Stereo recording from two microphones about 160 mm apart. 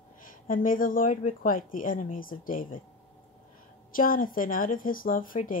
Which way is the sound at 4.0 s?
60° left (ahead or behind).